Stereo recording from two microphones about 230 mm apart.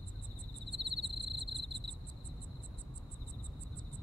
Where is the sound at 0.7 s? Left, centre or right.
Right.